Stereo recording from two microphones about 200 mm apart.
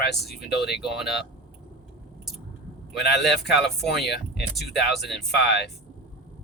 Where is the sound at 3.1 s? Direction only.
55° left (ahead or behind).